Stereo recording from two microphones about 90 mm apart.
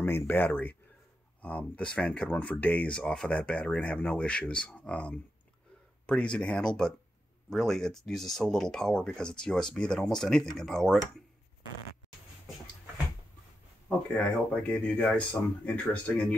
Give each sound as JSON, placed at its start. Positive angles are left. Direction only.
{"t": 0.0, "sound": "speech", "side_deg": 25}
{"t": 13.8, "sound": "speech", "side_deg": 15}